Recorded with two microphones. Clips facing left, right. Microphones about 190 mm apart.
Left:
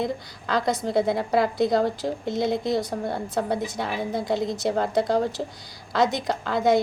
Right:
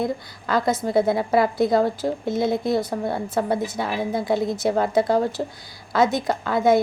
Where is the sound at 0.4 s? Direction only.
5° right (ahead or behind).